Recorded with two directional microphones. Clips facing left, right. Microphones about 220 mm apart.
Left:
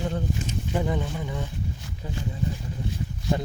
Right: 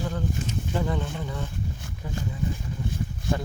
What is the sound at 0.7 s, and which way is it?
Speech, 15° left (ahead or behind).